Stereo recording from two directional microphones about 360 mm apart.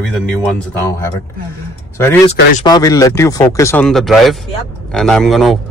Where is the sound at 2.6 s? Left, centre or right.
Centre.